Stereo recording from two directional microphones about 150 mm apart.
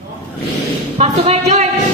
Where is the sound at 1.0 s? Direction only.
45° right (ahead or behind).